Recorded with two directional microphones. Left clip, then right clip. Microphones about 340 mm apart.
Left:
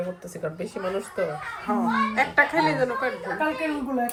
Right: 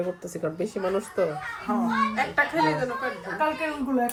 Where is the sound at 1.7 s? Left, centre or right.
Centre.